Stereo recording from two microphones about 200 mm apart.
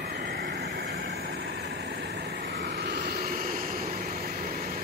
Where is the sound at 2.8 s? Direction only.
55° right (ahead or behind).